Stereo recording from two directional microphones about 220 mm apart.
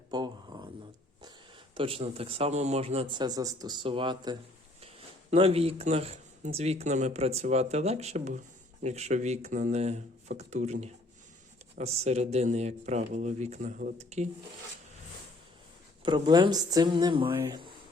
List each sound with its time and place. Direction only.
0.1 s a sound: 20° right (ahead or behind)
1.7 s speech: 25° right (ahead or behind)
16.0 s speech: 20° right (ahead or behind)